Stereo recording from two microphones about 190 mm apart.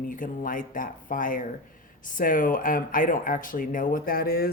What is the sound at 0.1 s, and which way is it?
Speech, 45° left (ahead or behind).